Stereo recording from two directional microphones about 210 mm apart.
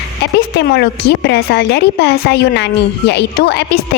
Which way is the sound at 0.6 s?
55° left (ahead or behind).